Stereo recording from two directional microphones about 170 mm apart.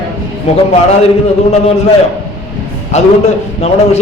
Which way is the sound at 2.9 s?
40° left (ahead or behind).